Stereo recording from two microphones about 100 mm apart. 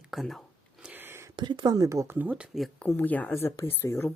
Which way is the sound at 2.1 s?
15° right (ahead or behind).